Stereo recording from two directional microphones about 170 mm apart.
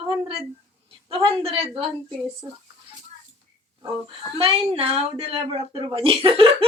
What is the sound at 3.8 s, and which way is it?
Speech, 35° right (ahead or behind).